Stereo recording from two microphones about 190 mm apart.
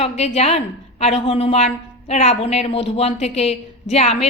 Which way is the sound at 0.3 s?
35° left (ahead or behind).